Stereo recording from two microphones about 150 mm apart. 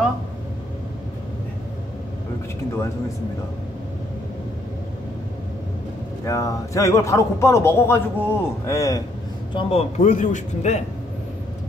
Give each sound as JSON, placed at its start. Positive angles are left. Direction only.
{"t": 6.2, "sound": "a man's voice", "side_deg": 20}
{"t": 9.5, "sound": "a man's voice", "side_deg": 35}
{"t": 10.0, "sound": "a man's voice", "side_deg": 55}